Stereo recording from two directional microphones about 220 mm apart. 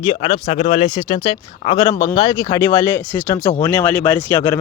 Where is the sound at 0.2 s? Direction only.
30° left (ahead or behind).